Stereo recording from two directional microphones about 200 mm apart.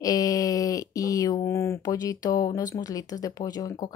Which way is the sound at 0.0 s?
15° left (ahead or behind).